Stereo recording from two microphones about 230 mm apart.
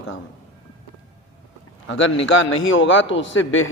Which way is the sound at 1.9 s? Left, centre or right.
Left.